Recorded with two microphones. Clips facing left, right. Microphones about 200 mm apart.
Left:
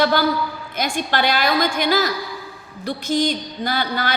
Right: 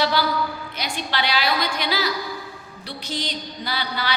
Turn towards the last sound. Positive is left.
turn(degrees=50)  # may be behind; listen again after turning